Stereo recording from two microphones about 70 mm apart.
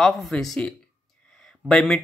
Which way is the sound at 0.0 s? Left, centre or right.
Centre.